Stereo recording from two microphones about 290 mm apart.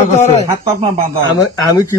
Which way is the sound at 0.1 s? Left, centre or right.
Left.